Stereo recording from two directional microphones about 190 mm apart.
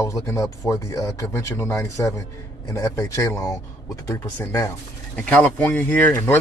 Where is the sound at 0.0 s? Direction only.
15° left (ahead or behind).